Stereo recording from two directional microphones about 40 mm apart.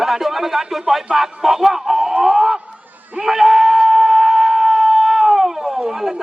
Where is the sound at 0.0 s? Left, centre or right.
Centre.